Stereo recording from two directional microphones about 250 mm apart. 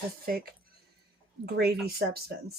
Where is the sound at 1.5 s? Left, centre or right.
Right.